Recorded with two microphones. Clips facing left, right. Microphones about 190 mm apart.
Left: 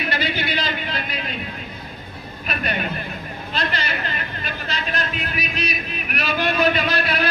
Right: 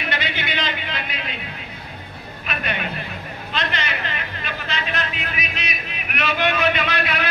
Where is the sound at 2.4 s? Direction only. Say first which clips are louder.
Left 2 dB; 40° left (ahead or behind).